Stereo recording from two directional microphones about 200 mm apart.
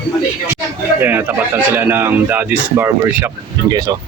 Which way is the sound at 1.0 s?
10° right (ahead or behind).